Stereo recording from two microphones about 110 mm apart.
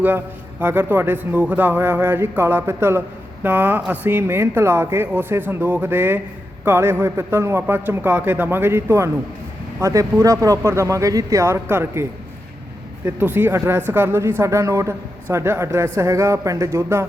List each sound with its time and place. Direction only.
0.6 s speech: 15° right (ahead or behind)
13.1 s speech: 15° right (ahead or behind)